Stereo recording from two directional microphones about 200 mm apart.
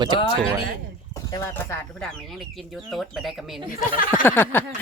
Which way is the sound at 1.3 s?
15° left (ahead or behind).